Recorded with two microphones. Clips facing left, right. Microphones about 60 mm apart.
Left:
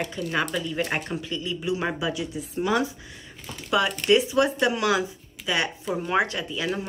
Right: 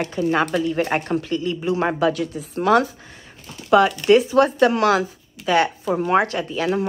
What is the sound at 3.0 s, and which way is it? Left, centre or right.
Speech, right.